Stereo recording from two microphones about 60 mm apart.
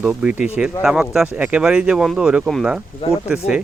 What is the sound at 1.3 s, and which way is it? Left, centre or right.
Speech, right.